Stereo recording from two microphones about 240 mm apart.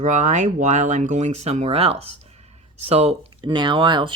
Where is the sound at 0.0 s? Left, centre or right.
Right.